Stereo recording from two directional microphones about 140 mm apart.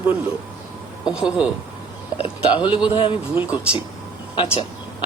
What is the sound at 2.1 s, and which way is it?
Speech, 40° left (ahead or behind).